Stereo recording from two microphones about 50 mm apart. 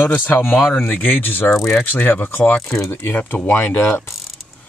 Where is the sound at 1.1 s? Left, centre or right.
Left.